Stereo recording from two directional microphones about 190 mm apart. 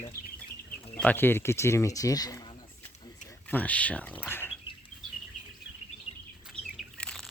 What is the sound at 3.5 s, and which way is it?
Speech, 10° left (ahead or behind).